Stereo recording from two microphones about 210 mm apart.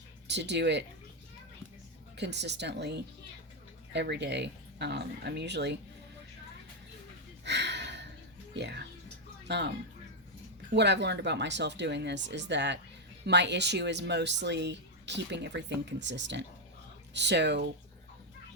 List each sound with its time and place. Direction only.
0.3 s speech: 55° right (ahead or behind)
2.1 s speech: 55° right (ahead or behind)
7.4 s a sound: 55° right (ahead or behind)
8.5 s speech: 55° right (ahead or behind)